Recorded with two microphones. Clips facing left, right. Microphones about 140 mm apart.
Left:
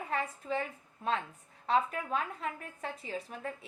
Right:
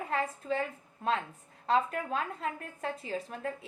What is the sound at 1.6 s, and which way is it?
A woman's voice, 40° right (ahead or behind).